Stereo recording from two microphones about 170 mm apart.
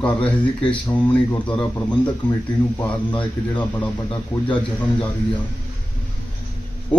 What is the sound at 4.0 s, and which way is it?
Speech, 30° left (ahead or behind).